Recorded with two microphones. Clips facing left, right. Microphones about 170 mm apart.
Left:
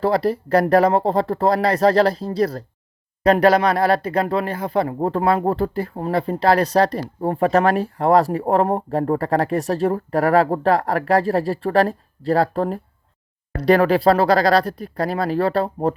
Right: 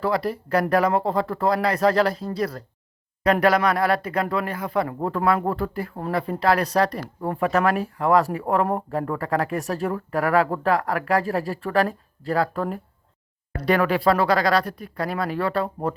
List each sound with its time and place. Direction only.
0.0 s speech: 35° left (ahead or behind)